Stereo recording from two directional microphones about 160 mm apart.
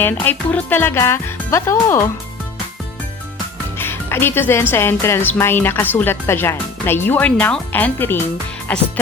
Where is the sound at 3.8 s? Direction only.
15° left (ahead or behind).